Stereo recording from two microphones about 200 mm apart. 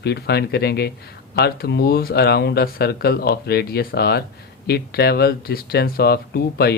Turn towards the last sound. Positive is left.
turn(degrees=50)  # may be behind; listen again after turning